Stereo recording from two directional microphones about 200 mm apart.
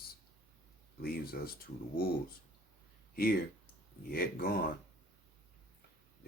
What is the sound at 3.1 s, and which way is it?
Speech, 50° left (ahead or behind).